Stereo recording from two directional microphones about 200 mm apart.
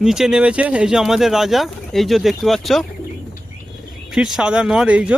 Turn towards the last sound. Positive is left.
turn(degrees=-5)  # may be behind; listen again after turning